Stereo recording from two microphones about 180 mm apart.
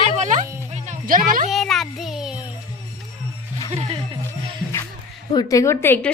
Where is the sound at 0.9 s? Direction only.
50° right (ahead or behind).